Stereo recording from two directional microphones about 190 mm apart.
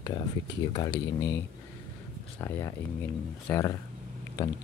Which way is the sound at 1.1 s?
20° left (ahead or behind).